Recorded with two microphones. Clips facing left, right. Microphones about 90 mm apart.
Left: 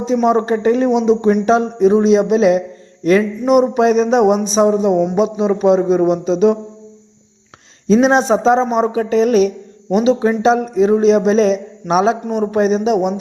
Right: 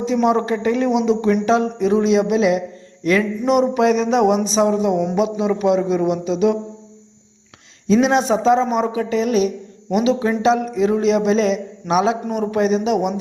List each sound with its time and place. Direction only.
0.0 s a man's voice: 30° left (ahead or behind)
3.4 s a man's voice: 20° left (ahead or behind); by 6.6 s 35° left (ahead or behind)
8.0 s a man's voice: 30° left (ahead or behind)
8.9 s a woman's voice: 40° left (ahead or behind)
9.9 s a man's voice: 30° left (ahead or behind)